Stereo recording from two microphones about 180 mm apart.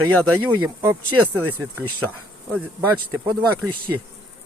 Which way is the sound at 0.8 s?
15° right (ahead or behind).